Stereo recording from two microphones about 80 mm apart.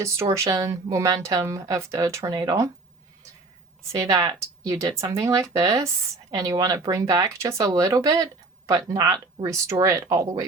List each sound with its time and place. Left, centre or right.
0.0 s speech: right
2.3 s speech: right
3.9 s speech: right